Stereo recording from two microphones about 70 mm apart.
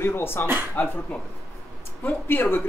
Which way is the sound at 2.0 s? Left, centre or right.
Left.